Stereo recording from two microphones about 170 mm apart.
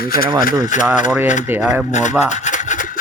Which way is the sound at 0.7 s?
45° left (ahead or behind).